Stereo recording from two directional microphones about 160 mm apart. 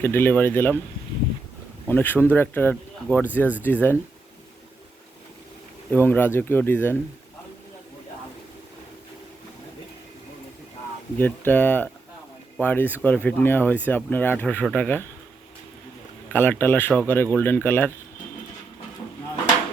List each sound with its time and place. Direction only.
0.0 s speech: 15° left (ahead or behind)
1.9 s speech: 10° left (ahead or behind)
3.4 s speech: 10° right (ahead or behind)
3.7 s speech: 10° left (ahead or behind)
5.9 s speech: 10° left (ahead or behind)
11.2 s speech: 10° left (ahead or behind)
16.3 s speech: 10° left (ahead or behind)